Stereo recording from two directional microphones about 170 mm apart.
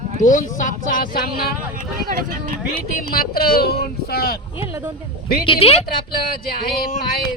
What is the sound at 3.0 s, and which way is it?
Speech, 60° left (ahead or behind).